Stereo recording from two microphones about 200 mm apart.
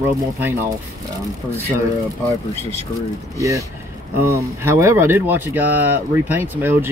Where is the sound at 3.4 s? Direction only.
15° right (ahead or behind).